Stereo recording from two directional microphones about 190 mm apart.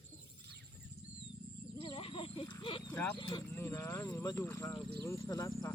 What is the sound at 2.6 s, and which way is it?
Horse, 25° left (ahead or behind).